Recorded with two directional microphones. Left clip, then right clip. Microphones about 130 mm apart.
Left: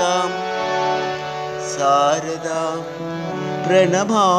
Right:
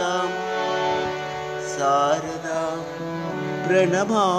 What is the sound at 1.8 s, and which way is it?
Music, 30° left (ahead or behind).